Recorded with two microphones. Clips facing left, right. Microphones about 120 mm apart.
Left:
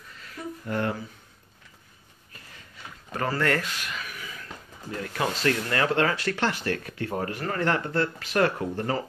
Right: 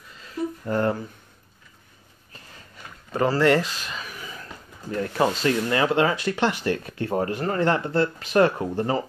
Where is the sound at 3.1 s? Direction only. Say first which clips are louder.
Right 7 dB; 25° right (ahead or behind).